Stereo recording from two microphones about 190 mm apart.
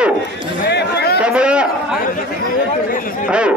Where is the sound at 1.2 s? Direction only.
5° right (ahead or behind).